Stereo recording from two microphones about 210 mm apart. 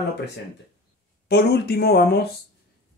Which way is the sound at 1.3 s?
50° left (ahead or behind).